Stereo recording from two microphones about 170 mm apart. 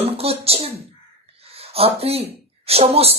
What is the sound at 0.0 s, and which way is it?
A woman's voice, 35° right (ahead or behind).